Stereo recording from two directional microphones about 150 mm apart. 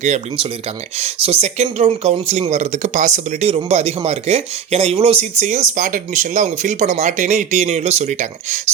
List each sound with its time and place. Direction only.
0.9 s speech: 45° right (ahead or behind)